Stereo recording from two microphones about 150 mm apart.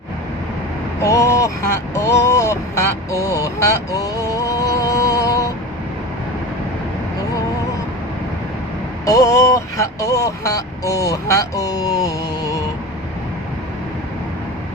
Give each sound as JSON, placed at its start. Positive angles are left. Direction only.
{"t": 1.0, "sound": "speech", "side_deg": 20}
{"t": 9.0, "sound": "speech", "side_deg": 20}